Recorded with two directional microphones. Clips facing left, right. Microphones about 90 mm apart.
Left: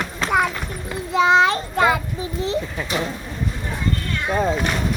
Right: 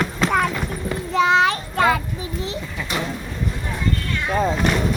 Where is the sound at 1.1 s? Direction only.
20° left (ahead or behind).